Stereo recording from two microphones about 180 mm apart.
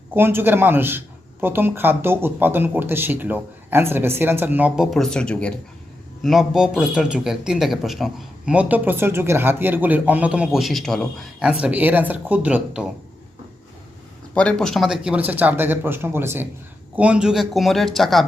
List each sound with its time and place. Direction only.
0.1 s speech: 10° right (ahead or behind)
14.3 s speech: 5° left (ahead or behind)